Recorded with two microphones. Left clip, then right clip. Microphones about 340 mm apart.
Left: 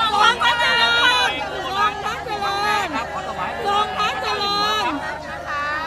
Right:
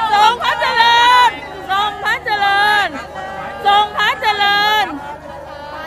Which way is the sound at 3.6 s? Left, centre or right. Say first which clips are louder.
Right 8 dB; right.